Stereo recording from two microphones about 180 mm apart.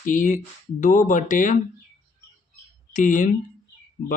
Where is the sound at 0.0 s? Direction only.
45° left (ahead or behind).